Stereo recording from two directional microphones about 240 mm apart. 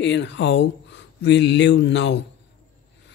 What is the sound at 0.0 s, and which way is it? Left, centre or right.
Speech, left.